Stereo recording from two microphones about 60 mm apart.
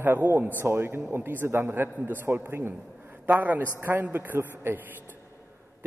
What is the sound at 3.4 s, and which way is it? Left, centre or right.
A man's voice, right.